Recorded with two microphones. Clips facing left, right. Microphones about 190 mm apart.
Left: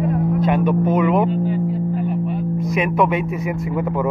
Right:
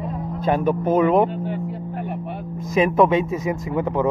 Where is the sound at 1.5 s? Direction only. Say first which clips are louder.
Left 7 dB; 60° right (ahead or behind).